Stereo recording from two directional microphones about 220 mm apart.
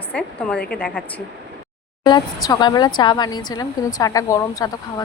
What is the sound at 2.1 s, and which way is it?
A woman's voice, 20° left (ahead or behind).